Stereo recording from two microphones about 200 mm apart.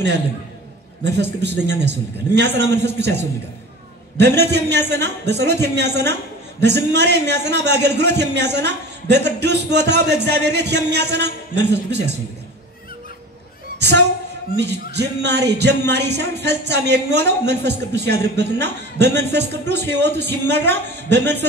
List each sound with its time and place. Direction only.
1.0 s speech: 60° right (ahead or behind)
4.4 s speech: 55° right (ahead or behind)
13.7 s a woman's voice: 55° right (ahead or behind)